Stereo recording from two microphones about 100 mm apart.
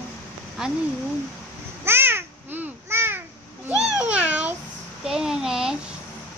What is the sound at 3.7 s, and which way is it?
Babbling, 10° right (ahead or behind).